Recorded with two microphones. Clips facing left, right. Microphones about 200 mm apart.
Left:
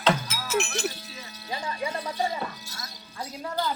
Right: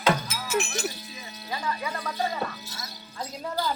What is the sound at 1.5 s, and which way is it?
Speech, 30° left (ahead or behind).